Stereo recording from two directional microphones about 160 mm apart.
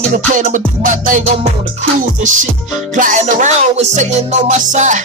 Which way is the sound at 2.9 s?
55° right (ahead or behind).